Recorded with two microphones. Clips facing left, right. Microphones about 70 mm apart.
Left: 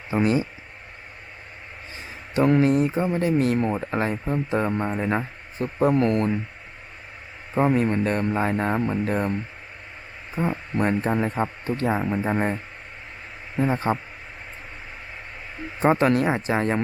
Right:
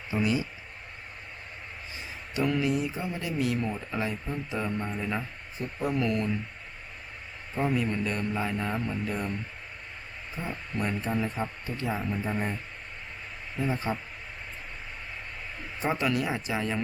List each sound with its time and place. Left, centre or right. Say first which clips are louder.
0.1 s speech: left 6 dB; left
2.3 s speech: left 8 dB; left
7.5 s speech: left 7 dB; left
10.4 s speech: left 9 dB; left
13.6 s speech: left 7 dB; left
15.8 s speech: left 9 dB; left